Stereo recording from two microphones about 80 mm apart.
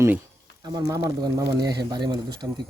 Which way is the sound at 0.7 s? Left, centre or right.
Right.